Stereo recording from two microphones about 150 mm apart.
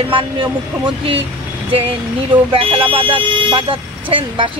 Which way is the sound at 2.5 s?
35° right (ahead or behind).